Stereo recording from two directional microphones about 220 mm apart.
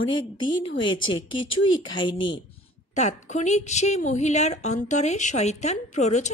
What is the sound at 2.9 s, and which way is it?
A woman's voice, 30° left (ahead or behind).